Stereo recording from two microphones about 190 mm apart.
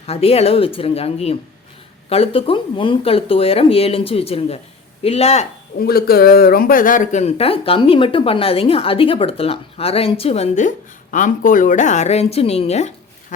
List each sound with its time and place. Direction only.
0.1 s speech: 30° left (ahead or behind)
5.8 s speech: 55° left (ahead or behind); by 12.9 s 35° left (ahead or behind)